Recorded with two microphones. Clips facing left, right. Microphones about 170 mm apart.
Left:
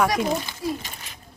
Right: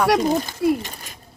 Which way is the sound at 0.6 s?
70° right (ahead or behind).